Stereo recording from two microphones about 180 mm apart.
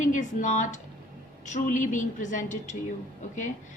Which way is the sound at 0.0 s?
45° left (ahead or behind).